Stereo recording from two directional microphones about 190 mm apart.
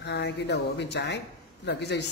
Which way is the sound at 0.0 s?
65° left (ahead or behind).